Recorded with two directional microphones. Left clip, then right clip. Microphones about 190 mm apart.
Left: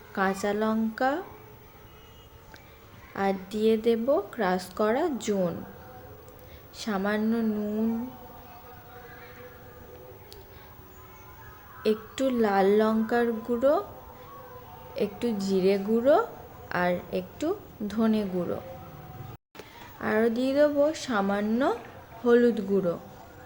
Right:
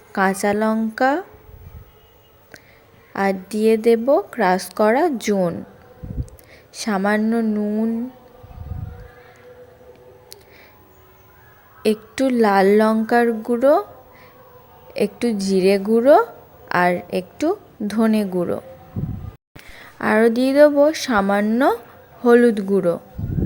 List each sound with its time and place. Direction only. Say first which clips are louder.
0.1 s a woman's voice: right 9 dB; 45° right (ahead or behind)
3.1 s a woman's voice: right 7 dB; 45° right (ahead or behind)
6.7 s a woman's voice: right 9 dB; 45° right (ahead or behind)
11.8 s a woman's voice: right 7 dB; 45° right (ahead or behind)
14.9 s a woman's voice: right 8 dB; 45° right (ahead or behind)
19.7 s a woman's voice: right 9 dB; 50° right (ahead or behind)